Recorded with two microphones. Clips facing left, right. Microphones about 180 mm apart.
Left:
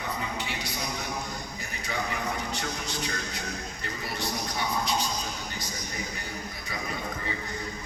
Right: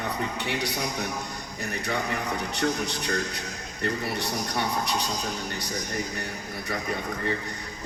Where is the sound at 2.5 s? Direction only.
65° right (ahead or behind).